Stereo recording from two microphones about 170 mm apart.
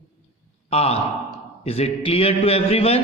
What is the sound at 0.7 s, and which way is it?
A man's voice, 35° left (ahead or behind).